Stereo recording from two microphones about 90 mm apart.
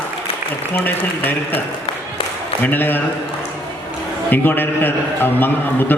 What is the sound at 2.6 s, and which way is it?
Speech, 25° left (ahead or behind).